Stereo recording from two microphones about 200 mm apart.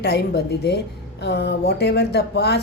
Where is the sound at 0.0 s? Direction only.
55° left (ahead or behind).